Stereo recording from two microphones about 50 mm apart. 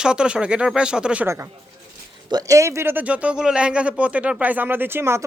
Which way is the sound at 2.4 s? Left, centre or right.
Right.